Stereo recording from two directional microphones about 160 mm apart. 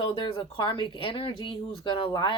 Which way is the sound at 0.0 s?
30° left (ahead or behind).